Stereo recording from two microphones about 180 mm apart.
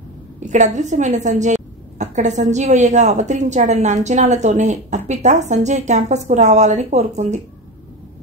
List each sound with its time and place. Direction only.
0.5 s a woman's voice: 40° right (ahead or behind)